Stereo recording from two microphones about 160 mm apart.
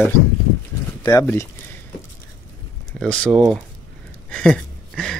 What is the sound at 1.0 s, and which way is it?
Speech, 20° left (ahead or behind).